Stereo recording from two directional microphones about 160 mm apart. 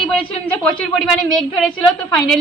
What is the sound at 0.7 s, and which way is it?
Speech, 5° left (ahead or behind).